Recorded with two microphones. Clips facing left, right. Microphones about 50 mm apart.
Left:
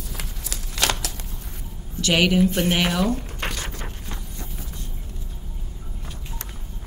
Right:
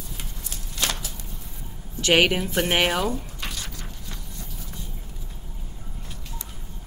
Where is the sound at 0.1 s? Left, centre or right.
Left.